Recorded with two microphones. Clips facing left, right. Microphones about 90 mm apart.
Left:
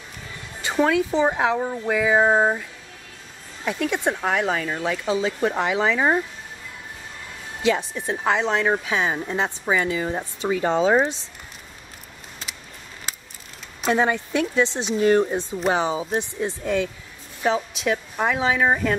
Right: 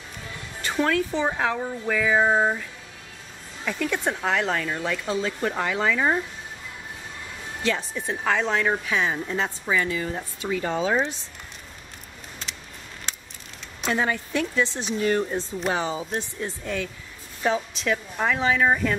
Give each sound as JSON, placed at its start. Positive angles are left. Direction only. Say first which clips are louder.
{"t": 0.6, "sound": "speech", "louder": "left 3 dB", "side_deg": 15}
{"t": 3.6, "sound": "speech", "louder": "left 3 dB", "side_deg": 15}
{"t": 7.6, "sound": "speech", "louder": "left 5 dB", "side_deg": 10}
{"t": 13.1, "sound": "a sound", "louder": "left 1 dB", "side_deg": 5}
{"t": 13.9, "sound": "speech", "louder": "left 3 dB", "side_deg": 25}
{"t": 17.4, "sound": "speech", "louder": "left 2 dB", "side_deg": 5}